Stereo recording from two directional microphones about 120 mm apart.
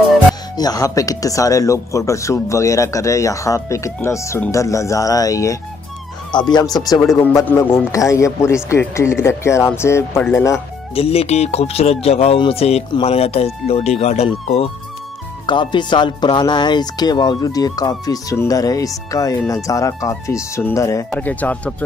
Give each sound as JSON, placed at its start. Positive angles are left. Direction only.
{"t": 0.6, "sound": "speech", "side_deg": 30}
{"t": 7.4, "sound": "speech", "side_deg": 20}
{"t": 11.0, "sound": "speech", "side_deg": 55}
{"t": 15.4, "sound": "speech", "side_deg": 40}
{"t": 21.2, "sound": "speech", "side_deg": 15}